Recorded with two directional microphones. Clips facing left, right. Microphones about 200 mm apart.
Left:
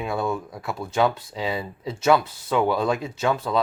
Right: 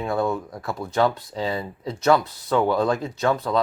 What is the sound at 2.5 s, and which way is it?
Speech, 5° left (ahead or behind).